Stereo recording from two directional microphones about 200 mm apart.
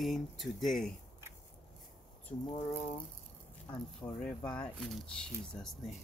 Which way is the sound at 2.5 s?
30° left (ahead or behind).